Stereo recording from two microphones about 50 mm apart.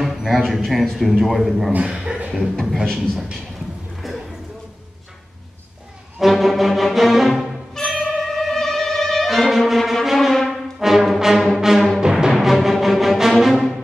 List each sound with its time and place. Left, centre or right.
0.0 s a sound: centre
0.4 s music: centre
1.7 s speech: right
2.0 s beatboxing: right
2.6 s music: centre
4.0 s music: centre
6.3 s music: centre
10.8 s brass instrument: centre
11.5 s music: centre
12.3 s music: centre